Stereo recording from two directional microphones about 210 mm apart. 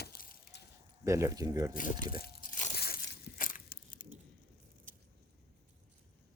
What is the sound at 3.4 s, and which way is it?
Tearing, 40° left (ahead or behind).